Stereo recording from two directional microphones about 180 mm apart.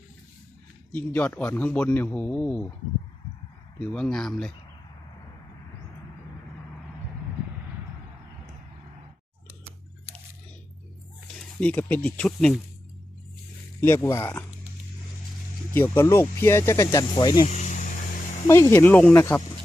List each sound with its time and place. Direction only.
0.9 s speech: 10° left (ahead or behind)
3.8 s speech: 5° left (ahead or behind)
11.3 s speech: 10° left (ahead or behind)
13.8 s speech: 15° left (ahead or behind)
15.7 s speech: 10° left (ahead or behind)
17.5 s vehicle: 40° left (ahead or behind)
18.4 s speech: 15° left (ahead or behind)